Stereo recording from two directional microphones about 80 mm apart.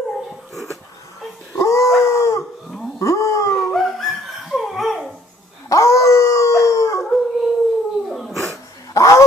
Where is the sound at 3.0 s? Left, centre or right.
Left.